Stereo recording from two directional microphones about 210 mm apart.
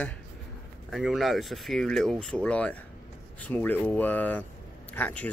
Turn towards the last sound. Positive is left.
turn(degrees=5)  # may be behind; listen again after turning